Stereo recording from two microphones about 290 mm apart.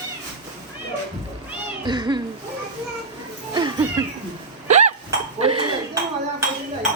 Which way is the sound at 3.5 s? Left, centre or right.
Centre.